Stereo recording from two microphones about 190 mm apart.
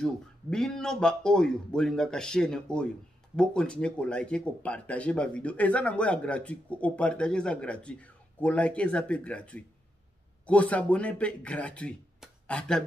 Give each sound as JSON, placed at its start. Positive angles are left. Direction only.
{"t": 0.0, "sound": "speech", "side_deg": 5}